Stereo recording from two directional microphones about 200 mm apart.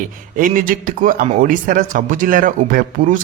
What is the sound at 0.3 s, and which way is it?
A man's voice, 45° right (ahead or behind).